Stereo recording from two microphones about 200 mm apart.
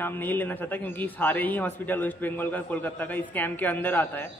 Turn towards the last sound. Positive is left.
turn(degrees=10)  # may be behind; listen again after turning